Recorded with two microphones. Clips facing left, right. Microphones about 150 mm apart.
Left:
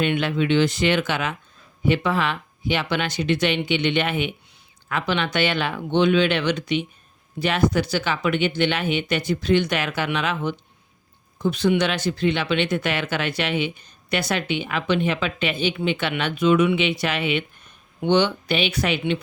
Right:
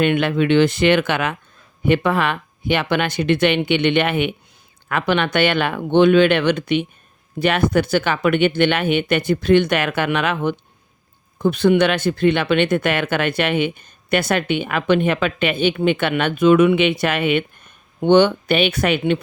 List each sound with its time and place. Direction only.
0.0 s speech: 55° right (ahead or behind)